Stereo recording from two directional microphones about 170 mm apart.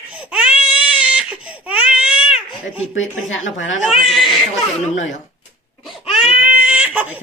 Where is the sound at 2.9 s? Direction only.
90° left.